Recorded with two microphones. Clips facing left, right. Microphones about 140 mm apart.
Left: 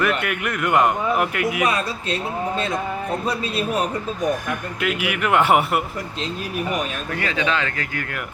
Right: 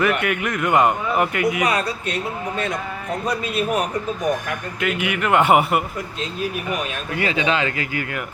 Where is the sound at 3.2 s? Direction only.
30° left (ahead or behind).